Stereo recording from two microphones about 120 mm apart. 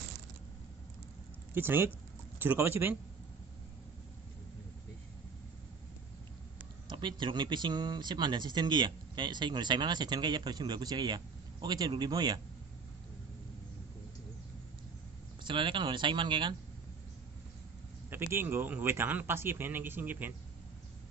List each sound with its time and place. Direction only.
1.5 s speech: 20° right (ahead or behind)
6.9 s speech: 40° right (ahead or behind)
15.4 s speech: 45° right (ahead or behind)
18.3 s a man's voice: 20° right (ahead or behind)